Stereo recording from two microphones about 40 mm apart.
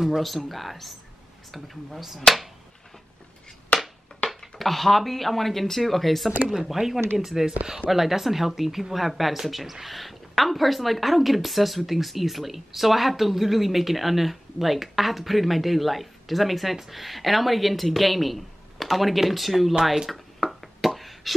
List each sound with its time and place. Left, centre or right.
0.5 s speech: centre
3.7 s a sound: left
4.4 s speech: centre
20.1 s beatboxing: centre